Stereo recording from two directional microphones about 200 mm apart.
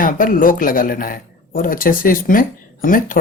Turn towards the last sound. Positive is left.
turn(degrees=40)  # may be behind; listen again after turning